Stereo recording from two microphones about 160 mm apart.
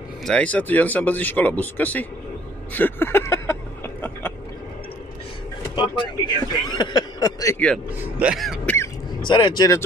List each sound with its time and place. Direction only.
0.2 s speech: 5° left (ahead or behind)
2.7 s a sound: 10° left (ahead or behind)
5.8 s speech: 25° left (ahead or behind)
7.5 s speech: 5° left (ahead or behind)
9.3 s speech: 25° left (ahead or behind)